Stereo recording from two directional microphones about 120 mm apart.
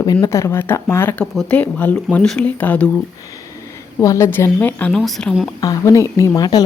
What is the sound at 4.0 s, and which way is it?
Speech, 25° left (ahead or behind).